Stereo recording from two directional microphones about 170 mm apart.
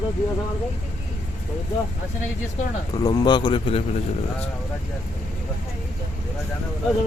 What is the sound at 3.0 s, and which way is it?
Speech, 25° left (ahead or behind).